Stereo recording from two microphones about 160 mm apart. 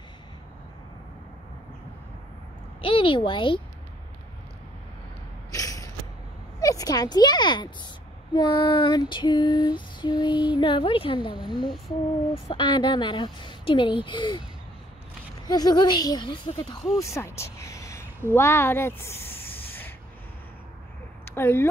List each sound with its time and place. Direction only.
2.8 s a woman's voice: 35° left (ahead or behind)
5.5 s a sound: 20° left (ahead or behind)
6.6 s speech: 20° left (ahead or behind)
8.4 s female singing: 25° left (ahead or behind)
11.5 s a sound: centre (ahead or behind)
12.4 s a woman's voice: 30° left (ahead or behind)
15.4 s female singing: 25° left (ahead or behind)
18.3 s speech: 15° left (ahead or behind)
21.4 s speech: 15° left (ahead or behind)